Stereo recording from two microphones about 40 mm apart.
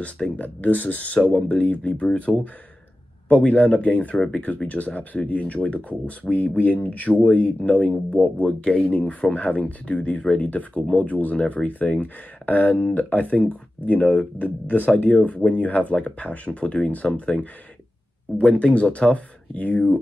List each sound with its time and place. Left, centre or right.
0.4 s speech: left